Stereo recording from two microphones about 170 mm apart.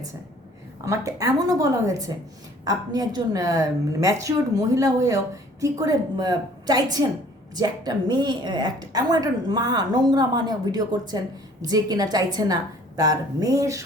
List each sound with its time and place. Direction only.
0.9 s a woman's voice: 20° right (ahead or behind)